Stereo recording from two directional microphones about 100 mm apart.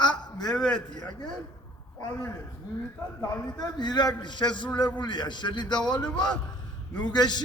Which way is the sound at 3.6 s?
45° left (ahead or behind).